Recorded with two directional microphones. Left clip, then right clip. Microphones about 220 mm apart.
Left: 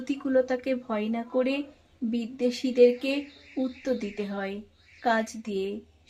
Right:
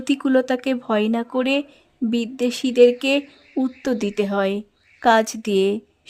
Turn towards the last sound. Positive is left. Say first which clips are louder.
# right 12 dB
turn(degrees=-50)  # may be behind; listen again after turning